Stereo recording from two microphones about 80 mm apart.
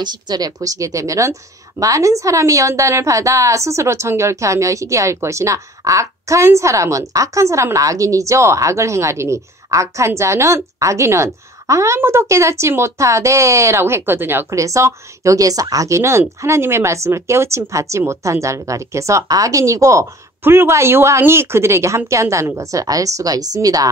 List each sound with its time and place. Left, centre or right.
0.0 s a woman's voice: right
14.6 s a woman's voice: right
20.4 s a woman's voice: right